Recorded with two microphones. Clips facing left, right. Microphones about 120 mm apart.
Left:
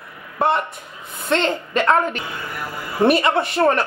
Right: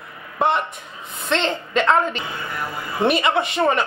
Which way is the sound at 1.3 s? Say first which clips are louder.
Left 1 dB; 20° right (ahead or behind).